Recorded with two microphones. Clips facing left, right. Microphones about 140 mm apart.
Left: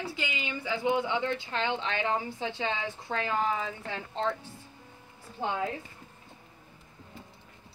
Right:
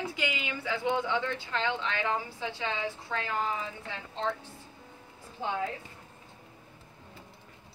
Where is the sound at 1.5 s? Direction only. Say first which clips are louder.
Left 1 dB; 25° left (ahead or behind).